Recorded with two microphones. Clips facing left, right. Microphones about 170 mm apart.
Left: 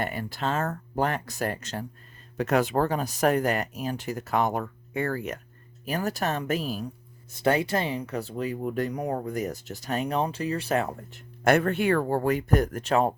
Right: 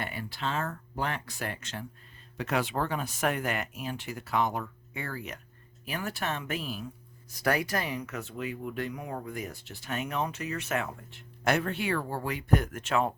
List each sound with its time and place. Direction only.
0.0 s speech: 45° left (ahead or behind)
7.3 s speech: 25° left (ahead or behind)